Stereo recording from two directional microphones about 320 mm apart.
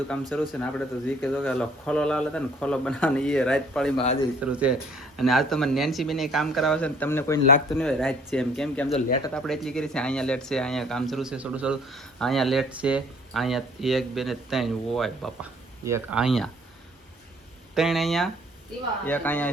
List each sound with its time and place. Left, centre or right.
0.1 s speech: centre
3.9 s speech: centre
4.4 s speech: centre
17.7 s speech: centre